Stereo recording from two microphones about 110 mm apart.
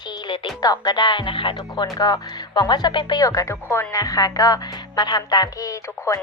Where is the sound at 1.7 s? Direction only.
35° left (ahead or behind).